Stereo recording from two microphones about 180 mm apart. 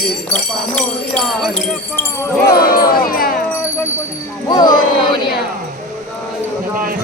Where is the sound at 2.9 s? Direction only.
55° left (ahead or behind).